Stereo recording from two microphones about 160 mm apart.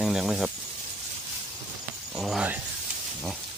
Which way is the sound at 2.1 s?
Centre (ahead or behind).